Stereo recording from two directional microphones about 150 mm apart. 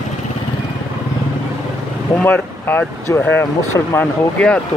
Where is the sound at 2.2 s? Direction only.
15° left (ahead or behind).